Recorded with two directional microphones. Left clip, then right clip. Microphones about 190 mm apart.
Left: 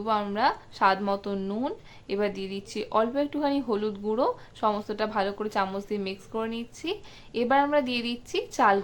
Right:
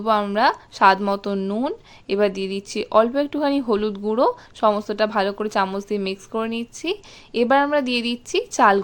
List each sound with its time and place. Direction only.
0.0 s speech: 35° right (ahead or behind)